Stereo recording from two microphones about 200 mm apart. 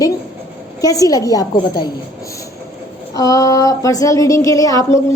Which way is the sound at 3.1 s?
15° left (ahead or behind).